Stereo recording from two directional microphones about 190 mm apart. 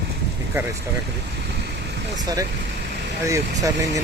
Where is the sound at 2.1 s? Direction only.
20° right (ahead or behind).